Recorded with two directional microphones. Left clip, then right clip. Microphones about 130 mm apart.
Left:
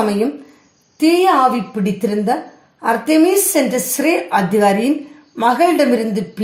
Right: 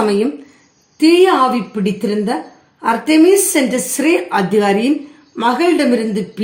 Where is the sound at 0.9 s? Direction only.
35° left (ahead or behind).